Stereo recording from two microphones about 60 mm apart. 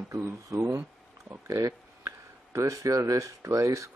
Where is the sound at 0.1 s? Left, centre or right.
Right.